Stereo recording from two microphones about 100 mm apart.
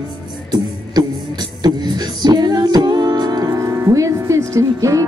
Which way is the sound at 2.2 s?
45° right (ahead or behind).